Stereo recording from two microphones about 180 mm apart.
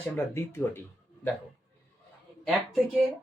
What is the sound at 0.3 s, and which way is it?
Speech, 15° left (ahead or behind).